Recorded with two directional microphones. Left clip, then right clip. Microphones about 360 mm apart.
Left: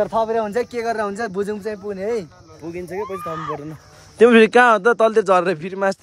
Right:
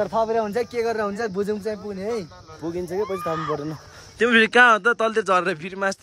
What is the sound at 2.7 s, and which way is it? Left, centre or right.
Speech, centre.